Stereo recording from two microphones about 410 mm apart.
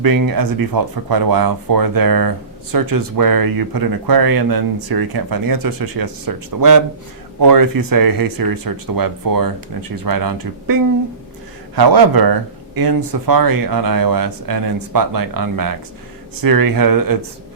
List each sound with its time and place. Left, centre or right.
0.0 s speech: right